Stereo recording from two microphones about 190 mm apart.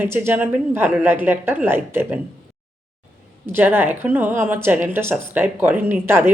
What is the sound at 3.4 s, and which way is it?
Speech, 10° right (ahead or behind).